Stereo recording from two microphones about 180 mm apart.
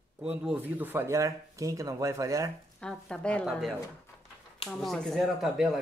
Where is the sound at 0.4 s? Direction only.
10° right (ahead or behind).